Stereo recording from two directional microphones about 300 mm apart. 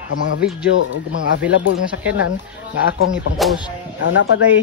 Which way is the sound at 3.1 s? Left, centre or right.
Centre.